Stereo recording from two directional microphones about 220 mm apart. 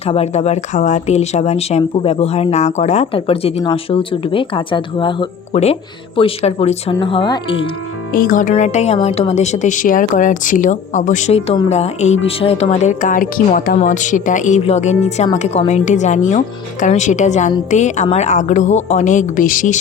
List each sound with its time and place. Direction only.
0.0 s speech: 30° left (ahead or behind)
8.1 s speech: 40° left (ahead or behind)